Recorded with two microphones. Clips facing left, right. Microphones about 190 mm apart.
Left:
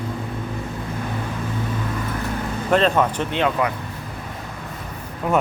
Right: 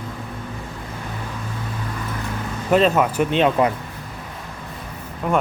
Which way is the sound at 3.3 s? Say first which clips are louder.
Right 4 dB; 20° right (ahead or behind).